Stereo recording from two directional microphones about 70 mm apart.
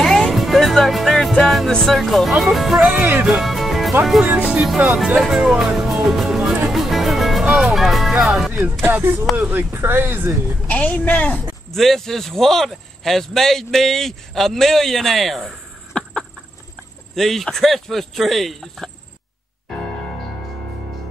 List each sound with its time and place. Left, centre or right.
0.0 s music: centre
1.3 s speech: centre
3.0 s speech: right
3.3 s music: centre
4.0 s speech: centre
6.0 s music: centre
8.1 s speech: centre
8.8 s speech: right
9.2 s speech: centre
9.5 s speech: right
10.7 s a woman's voice: left
11.7 s speech: centre
17.1 s speech: centre